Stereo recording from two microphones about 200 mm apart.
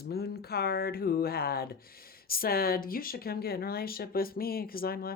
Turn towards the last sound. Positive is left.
turn(degrees=50)  # may be behind; listen again after turning